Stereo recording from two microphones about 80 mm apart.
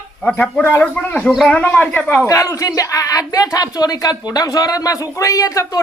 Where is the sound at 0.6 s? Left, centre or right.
Centre.